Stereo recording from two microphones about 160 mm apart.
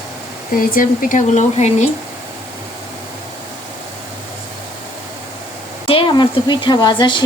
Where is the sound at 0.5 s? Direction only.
60° left (ahead or behind).